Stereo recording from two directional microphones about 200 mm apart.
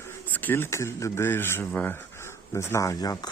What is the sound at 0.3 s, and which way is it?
Speech, 10° left (ahead or behind).